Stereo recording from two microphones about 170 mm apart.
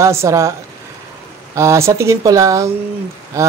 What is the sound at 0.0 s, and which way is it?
Speech, 15° right (ahead or behind).